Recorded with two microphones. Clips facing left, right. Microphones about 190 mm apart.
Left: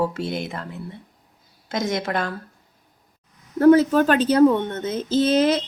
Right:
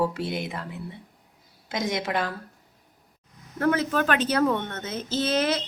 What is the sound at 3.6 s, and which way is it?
Speech, 35° left (ahead or behind).